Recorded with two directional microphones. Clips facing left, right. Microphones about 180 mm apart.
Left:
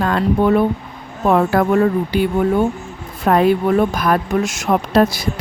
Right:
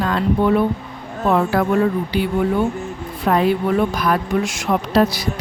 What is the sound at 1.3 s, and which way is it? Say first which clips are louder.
Speech: left 3 dB; 60° left (ahead or behind).